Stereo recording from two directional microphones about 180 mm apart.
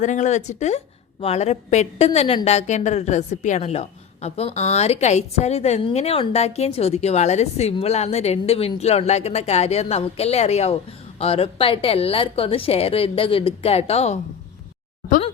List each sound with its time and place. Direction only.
0.0 s a woman's voice: 40° left (ahead or behind)